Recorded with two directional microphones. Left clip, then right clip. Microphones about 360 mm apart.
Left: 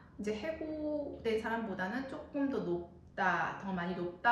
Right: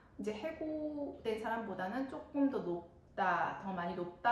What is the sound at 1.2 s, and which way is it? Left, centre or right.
Speech, centre.